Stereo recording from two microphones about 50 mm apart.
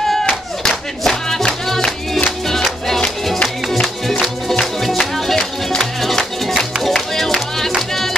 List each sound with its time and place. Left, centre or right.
0.0 s a sound: centre
0.7 s clapping: centre
2.1 s music: centre